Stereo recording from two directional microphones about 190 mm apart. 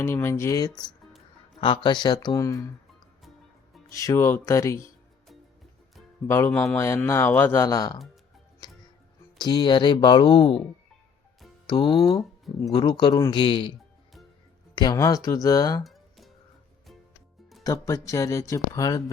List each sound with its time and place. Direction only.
0.0 s a man's voice: 15° left (ahead or behind)
3.8 s a man's voice: 15° left (ahead or behind)
6.2 s a man's voice: 10° left (ahead or behind)
9.4 s speech: 25° left (ahead or behind)
11.6 s speech: 25° left (ahead or behind)
14.8 s a man's voice: 20° left (ahead or behind)
15.8 s music: centre (ahead or behind)
17.6 s a man's voice: 20° left (ahead or behind)